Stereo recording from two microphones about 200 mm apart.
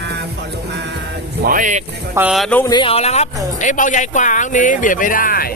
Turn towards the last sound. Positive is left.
turn(degrees=45)  # may be behind; listen again after turning